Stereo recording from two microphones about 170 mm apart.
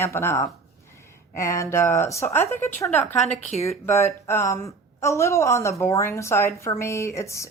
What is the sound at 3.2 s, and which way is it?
Speech, 40° left (ahead or behind).